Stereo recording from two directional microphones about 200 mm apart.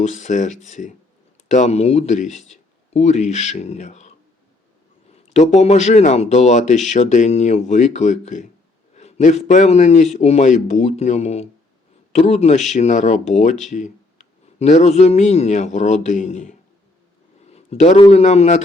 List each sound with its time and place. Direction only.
0.0 s speech: 35° left (ahead or behind)
5.1 s speech: 35° left (ahead or behind)
17.5 s a sound: 35° left (ahead or behind)
18.1 s speech: 35° left (ahead or behind)